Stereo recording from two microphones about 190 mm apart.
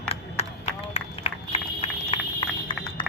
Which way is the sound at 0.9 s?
35° left (ahead or behind).